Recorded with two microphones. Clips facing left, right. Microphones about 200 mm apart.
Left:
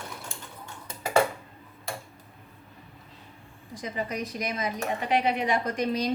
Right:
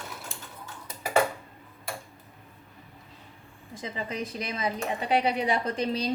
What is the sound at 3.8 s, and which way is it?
Speech, 25° right (ahead or behind).